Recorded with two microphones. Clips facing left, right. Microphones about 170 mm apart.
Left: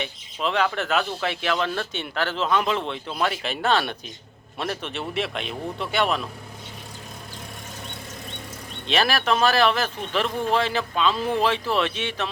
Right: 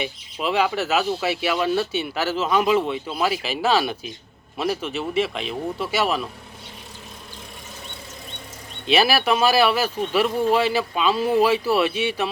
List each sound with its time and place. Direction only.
0.0 s speech: 10° right (ahead or behind)
8.9 s speech: 10° right (ahead or behind)